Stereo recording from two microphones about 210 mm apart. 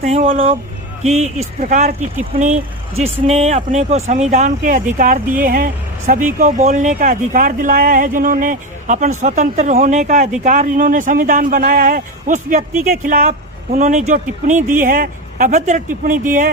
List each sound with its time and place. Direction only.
0.0 s speech: 30° right (ahead or behind)